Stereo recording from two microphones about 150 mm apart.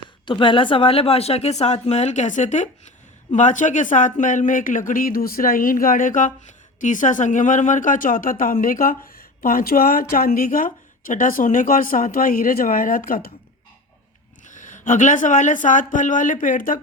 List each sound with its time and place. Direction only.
0.3 s speech: 35° left (ahead or behind); by 13.3 s 70° left (ahead or behind)
14.4 s speech: 60° left (ahead or behind)